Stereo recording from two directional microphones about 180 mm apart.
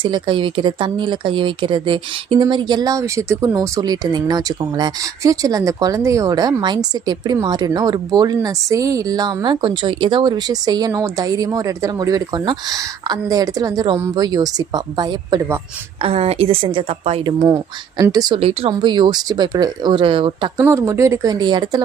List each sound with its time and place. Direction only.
0.0 s speech: 25° right (ahead or behind)
16.0 s a woman's voice: 35° right (ahead or behind)
20.6 s speech: 15° right (ahead or behind)